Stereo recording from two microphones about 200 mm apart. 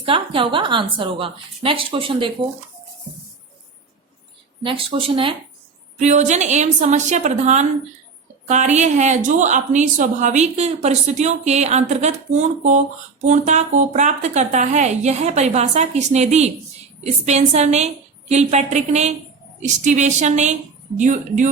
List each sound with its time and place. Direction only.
0.0 s a woman's voice: 25° right (ahead or behind)
4.6 s a woman's voice: 25° right (ahead or behind)